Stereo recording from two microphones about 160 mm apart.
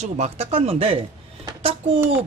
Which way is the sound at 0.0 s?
45° right (ahead or behind).